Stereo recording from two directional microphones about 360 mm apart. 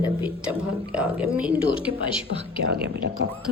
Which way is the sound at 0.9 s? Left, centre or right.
Centre.